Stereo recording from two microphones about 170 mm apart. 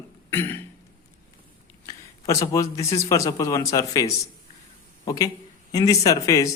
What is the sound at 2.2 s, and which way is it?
A man's voice, 20° left (ahead or behind).